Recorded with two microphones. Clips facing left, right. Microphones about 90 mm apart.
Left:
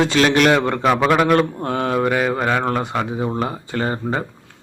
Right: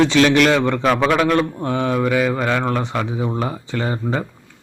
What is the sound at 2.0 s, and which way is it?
Speech, 35° left (ahead or behind).